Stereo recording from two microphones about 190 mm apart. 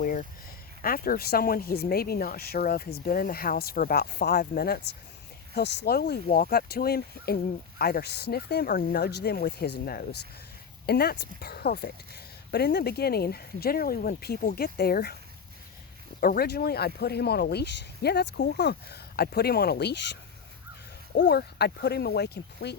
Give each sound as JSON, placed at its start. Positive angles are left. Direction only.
{"t": 0.0, "sound": "a sound", "side_deg": 45}
{"t": 0.8, "sound": "speech", "side_deg": 50}
{"t": 16.2, "sound": "speech", "side_deg": 50}
{"t": 21.2, "sound": "speech", "side_deg": 60}